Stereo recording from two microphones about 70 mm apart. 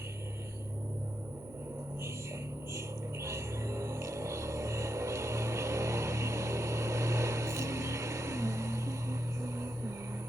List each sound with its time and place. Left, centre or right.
2.7 s music: right